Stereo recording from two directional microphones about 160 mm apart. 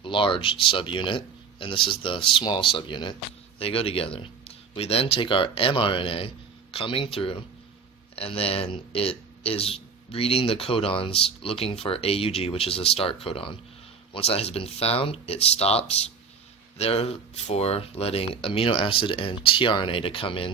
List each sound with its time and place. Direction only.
0.0 s speech: 30° left (ahead or behind)